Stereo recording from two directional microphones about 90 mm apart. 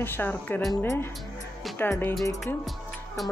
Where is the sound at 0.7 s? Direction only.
35° left (ahead or behind).